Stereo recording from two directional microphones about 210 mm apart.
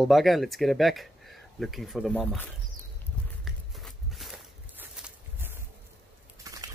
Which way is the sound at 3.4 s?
Centre (ahead or behind).